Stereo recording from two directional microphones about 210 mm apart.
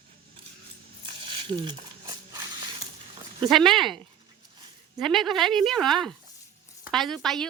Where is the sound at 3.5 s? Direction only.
Centre (ahead or behind).